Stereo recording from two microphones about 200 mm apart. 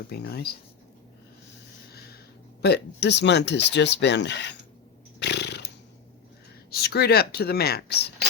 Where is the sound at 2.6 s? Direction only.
55° left (ahead or behind).